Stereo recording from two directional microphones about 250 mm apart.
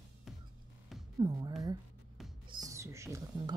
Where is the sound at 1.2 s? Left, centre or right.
Centre.